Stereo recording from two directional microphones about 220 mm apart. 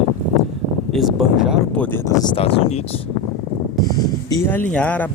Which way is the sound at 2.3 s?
25° left (ahead or behind).